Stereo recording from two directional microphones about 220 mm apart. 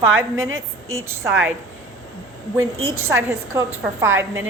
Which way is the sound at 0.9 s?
15° right (ahead or behind).